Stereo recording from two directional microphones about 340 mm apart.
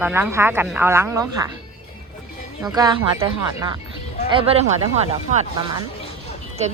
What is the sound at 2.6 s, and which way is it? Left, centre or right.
Speech, centre.